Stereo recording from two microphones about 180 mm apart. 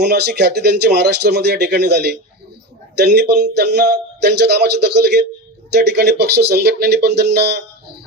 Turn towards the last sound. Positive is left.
turn(degrees=-65)  # may be behind; listen again after turning